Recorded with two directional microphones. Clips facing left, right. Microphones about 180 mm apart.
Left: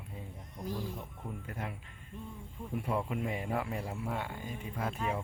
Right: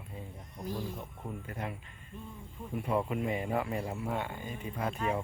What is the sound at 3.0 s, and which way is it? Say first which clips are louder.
Speech: right 3 dB; centre (ahead or behind).